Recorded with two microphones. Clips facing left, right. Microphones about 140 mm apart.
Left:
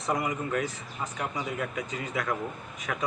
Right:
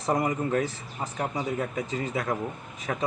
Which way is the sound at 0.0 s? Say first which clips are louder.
Right 4 dB; 35° right (ahead or behind).